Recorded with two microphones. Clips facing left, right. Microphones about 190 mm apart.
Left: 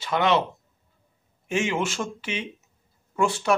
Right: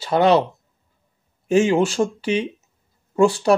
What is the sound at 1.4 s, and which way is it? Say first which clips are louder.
Speech: right 9 dB; 35° right (ahead or behind).